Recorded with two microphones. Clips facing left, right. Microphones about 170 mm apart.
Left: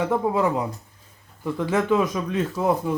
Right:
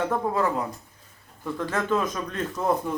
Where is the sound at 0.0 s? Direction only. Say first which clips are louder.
Left 3 dB; 10° left (ahead or behind).